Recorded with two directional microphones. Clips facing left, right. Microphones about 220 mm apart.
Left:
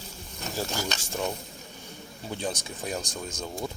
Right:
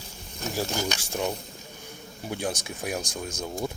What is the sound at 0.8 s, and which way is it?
Speech, 15° right (ahead or behind).